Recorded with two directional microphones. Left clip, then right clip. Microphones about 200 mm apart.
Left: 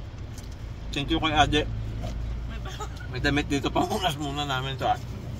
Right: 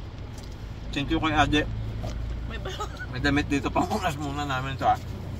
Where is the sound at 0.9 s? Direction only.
25° left (ahead or behind).